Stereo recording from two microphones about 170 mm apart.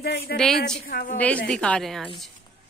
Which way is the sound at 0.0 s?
70° left (ahead or behind).